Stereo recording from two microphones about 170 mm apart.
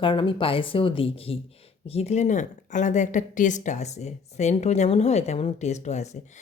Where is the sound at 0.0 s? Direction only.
30° left (ahead or behind).